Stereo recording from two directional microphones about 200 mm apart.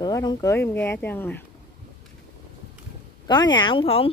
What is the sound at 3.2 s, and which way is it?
Speech, 20° left (ahead or behind).